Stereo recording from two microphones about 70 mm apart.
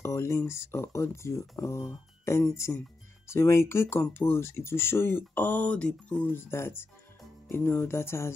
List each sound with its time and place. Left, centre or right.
0.0 s speech: left; by 6.2 s centre
6.2 s speech: left